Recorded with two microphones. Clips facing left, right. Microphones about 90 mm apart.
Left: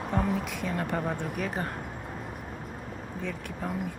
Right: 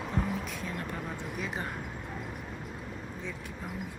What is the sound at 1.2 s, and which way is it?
Speech, 50° left (ahead or behind).